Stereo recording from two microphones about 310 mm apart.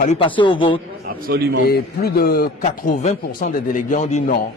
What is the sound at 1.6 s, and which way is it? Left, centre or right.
A man's voice, left.